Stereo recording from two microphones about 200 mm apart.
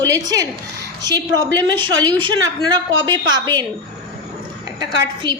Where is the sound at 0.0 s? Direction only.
15° right (ahead or behind).